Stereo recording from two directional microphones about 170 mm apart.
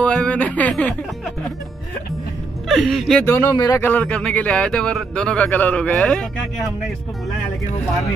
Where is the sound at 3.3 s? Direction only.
20° left (ahead or behind).